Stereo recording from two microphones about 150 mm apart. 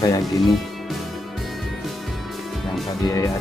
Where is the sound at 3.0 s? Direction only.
20° left (ahead or behind).